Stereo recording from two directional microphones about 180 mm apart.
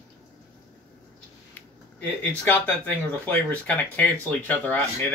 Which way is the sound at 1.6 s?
10° left (ahead or behind).